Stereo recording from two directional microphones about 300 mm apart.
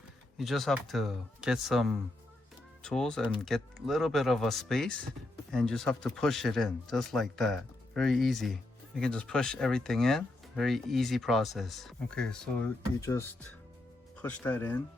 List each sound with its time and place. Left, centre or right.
0.3 s speech: centre